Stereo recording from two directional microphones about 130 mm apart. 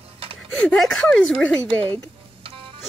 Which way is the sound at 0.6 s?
5° left (ahead or behind).